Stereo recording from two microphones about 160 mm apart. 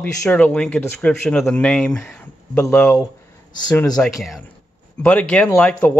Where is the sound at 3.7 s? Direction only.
25° left (ahead or behind).